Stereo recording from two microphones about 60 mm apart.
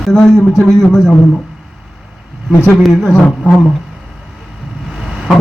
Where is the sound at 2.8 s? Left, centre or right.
Centre.